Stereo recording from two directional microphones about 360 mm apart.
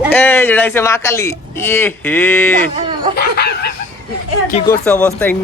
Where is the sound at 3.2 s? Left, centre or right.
Left.